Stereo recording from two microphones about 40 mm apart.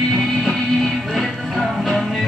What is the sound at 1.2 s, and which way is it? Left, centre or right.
Music, centre.